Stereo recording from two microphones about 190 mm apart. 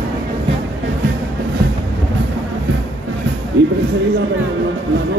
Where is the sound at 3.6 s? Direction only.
65° right (ahead or behind).